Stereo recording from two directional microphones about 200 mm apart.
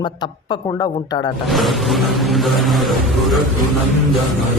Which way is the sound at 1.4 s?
Centre (ahead or behind).